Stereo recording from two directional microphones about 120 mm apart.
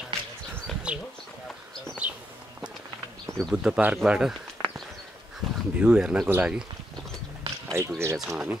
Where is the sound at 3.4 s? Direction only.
Centre (ahead or behind).